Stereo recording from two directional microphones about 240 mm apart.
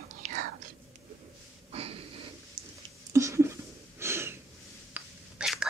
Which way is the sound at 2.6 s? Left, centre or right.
Centre.